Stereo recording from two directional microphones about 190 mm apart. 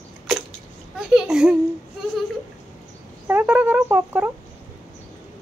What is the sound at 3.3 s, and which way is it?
Speech, 10° right (ahead or behind).